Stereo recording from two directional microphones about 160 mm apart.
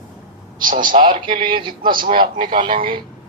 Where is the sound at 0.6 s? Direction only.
60° right (ahead or behind).